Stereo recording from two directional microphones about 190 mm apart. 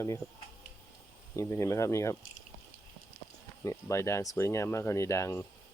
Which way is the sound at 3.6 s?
15° left (ahead or behind).